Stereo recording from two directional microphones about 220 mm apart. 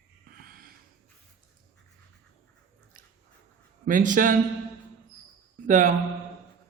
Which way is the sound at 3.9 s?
35° right (ahead or behind).